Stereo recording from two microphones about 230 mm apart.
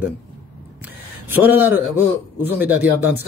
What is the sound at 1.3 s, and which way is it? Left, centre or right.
Speech, centre.